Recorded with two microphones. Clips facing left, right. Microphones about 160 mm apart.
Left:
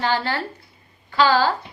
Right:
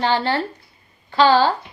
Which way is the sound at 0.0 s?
25° right (ahead or behind).